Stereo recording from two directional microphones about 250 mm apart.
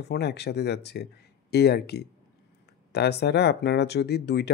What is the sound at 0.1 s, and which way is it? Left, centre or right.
Speech, left.